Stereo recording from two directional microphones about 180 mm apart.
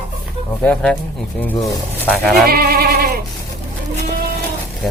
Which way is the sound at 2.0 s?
5° left (ahead or behind).